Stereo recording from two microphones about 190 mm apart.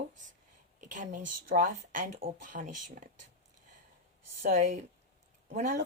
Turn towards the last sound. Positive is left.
turn(degrees=-45)  # may be behind; listen again after turning